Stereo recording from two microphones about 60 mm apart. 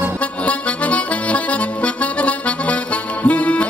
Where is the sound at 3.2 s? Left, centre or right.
Left.